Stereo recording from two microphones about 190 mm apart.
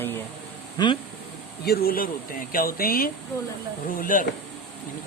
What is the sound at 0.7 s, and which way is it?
Speech, 25° left (ahead or behind).